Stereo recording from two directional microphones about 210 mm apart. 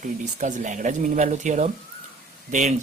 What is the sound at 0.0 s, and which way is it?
Speech, 35° right (ahead or behind).